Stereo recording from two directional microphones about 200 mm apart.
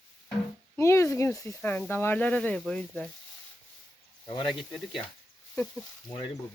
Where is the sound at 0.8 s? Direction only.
15° left (ahead or behind).